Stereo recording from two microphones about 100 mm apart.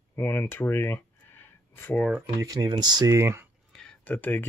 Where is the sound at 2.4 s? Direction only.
40° right (ahead or behind).